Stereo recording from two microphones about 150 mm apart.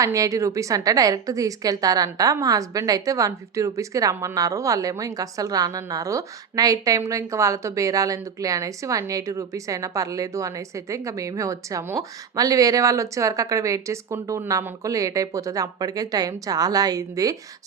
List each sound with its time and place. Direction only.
0.0 s a woman's voice: 20° right (ahead or behind)